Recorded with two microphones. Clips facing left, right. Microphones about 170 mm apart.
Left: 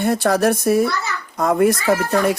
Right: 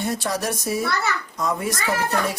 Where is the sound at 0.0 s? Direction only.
60° left (ahead or behind).